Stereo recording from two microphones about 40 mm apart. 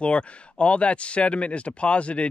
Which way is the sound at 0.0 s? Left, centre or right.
Left.